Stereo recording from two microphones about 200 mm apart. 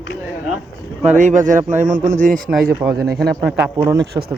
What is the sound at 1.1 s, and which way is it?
Speech, 40° right (ahead or behind).